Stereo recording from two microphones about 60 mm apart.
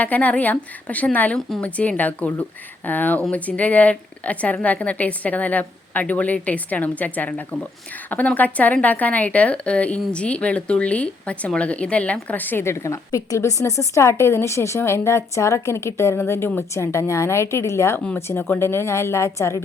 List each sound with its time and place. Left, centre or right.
0.0 s a woman's voice: left
12.6 s a woman's voice: left
18.3 s a woman's voice: left